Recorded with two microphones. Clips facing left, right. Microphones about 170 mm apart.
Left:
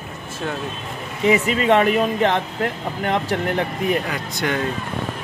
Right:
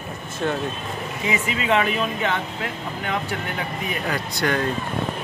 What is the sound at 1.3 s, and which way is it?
Speech, 35° left (ahead or behind).